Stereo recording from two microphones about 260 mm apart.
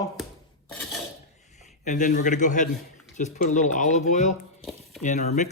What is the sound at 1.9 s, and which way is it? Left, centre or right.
Speech, left.